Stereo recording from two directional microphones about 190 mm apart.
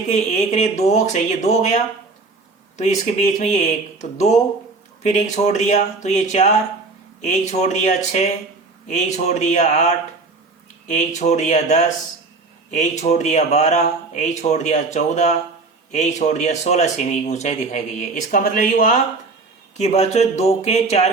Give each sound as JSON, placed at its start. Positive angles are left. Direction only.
{"t": 0.1, "sound": "speech", "side_deg": 40}